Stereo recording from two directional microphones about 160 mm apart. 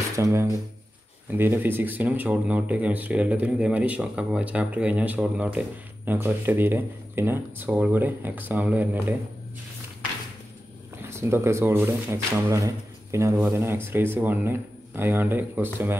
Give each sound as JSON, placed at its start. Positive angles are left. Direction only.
{"t": 0.2, "sound": "speech", "side_deg": -20}
{"t": 11.0, "sound": "speech", "side_deg": -15}